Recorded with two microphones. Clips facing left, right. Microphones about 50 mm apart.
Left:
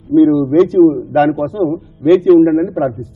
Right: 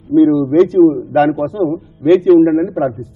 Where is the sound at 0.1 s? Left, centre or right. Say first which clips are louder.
Left 1 dB; centre.